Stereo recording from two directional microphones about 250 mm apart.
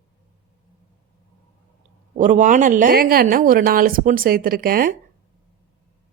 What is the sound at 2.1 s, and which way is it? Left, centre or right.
A woman's voice, right.